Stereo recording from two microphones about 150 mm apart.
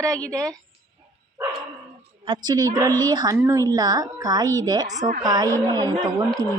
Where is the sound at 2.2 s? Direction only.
30° right (ahead or behind).